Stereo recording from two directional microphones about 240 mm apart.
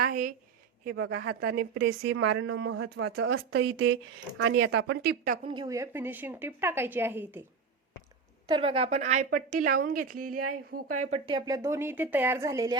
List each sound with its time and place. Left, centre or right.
0.1 s a woman's voice: right
0.9 s a woman's voice: right
3.1 s a woman's voice: right
3.3 s speech: right
4.4 s speech: right
4.7 s a woman's voice: right
5.5 s speech: centre
8.4 s a woman's voice: right